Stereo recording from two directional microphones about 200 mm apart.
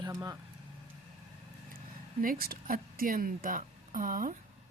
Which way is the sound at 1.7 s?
45° right (ahead or behind).